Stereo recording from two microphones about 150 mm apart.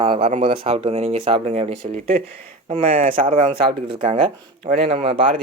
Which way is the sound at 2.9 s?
65° right (ahead or behind).